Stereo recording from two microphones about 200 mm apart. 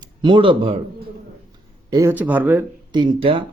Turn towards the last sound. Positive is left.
turn(degrees=-25)  # may be behind; listen again after turning